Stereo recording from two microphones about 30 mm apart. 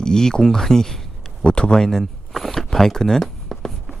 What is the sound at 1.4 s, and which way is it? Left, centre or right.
Speech, left.